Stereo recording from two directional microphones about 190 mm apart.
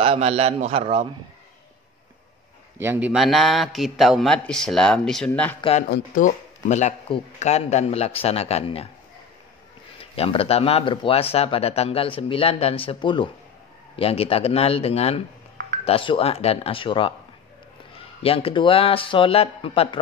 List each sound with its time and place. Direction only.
0.0 s a man's voice: 30° right (ahead or behind)
2.8 s a man's voice: 10° right (ahead or behind); by 5.6 s 5° left (ahead or behind)
5.6 s speech: 30° left (ahead or behind)
5.9 s speech: 45° left (ahead or behind)
9.9 s speech: 30° left (ahead or behind)
18.2 s speech: 30° left (ahead or behind)